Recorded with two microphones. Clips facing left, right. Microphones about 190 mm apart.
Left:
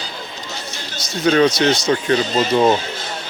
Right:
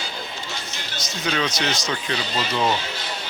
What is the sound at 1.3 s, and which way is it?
Speech, 40° left (ahead or behind).